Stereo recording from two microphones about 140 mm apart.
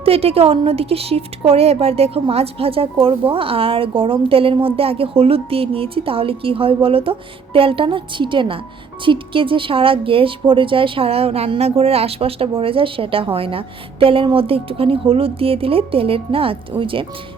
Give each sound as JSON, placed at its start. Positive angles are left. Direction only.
{"t": 0.0, "sound": "a woman's voice", "side_deg": -45}